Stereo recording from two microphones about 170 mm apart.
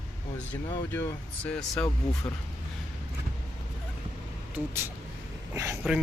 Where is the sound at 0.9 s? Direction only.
15° left (ahead or behind).